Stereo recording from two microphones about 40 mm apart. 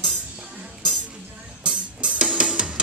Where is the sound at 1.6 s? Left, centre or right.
Right.